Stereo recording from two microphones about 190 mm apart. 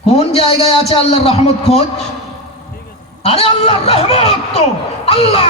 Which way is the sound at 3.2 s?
30° left (ahead or behind).